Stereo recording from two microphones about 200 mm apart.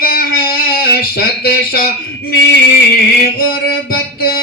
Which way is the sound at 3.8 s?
50° left (ahead or behind).